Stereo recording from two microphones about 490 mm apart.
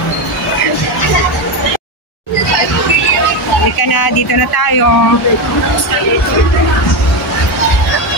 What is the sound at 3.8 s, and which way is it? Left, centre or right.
Speech, left.